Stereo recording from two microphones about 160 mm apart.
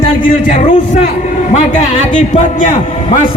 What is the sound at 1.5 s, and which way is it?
A man's voice, 50° left (ahead or behind).